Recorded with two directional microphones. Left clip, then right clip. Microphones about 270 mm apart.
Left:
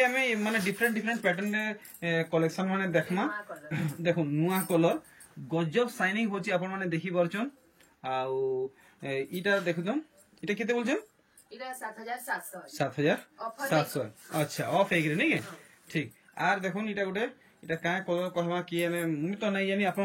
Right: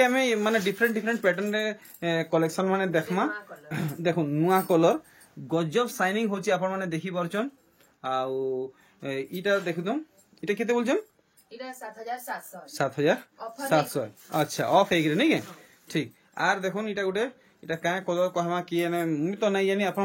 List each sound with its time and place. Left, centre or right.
0.0 s speech: centre
12.7 s speech: centre